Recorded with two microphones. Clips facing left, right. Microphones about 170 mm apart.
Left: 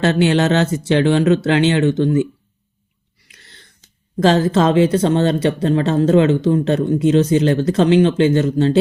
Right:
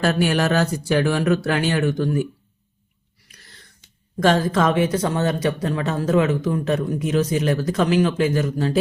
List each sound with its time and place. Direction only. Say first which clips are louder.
0.0 s speech: left 5 dB; 25° left (ahead or behind)
4.2 s speech: left 4 dB; 25° left (ahead or behind)